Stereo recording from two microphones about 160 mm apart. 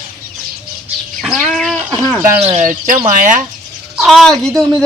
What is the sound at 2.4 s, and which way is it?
Speech, 50° right (ahead or behind).